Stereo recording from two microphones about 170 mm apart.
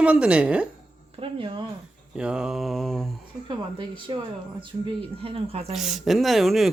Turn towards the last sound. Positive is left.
turn(degrees=0)  # may be behind; listen again after turning